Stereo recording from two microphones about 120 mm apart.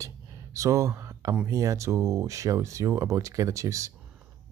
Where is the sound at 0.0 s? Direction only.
25° right (ahead or behind).